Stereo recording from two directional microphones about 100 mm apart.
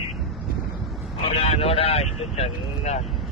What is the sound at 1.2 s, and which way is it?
Speech, 75° left (ahead or behind).